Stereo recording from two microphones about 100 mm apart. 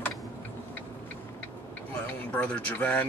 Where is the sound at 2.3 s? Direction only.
10° left (ahead or behind).